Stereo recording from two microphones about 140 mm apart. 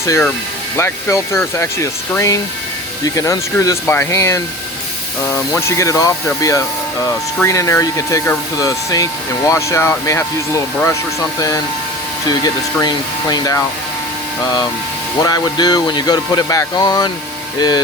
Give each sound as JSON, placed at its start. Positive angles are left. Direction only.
{"t": 0.0, "sound": "speech", "side_deg": 20}
{"t": 15.2, "sound": "speech", "side_deg": 30}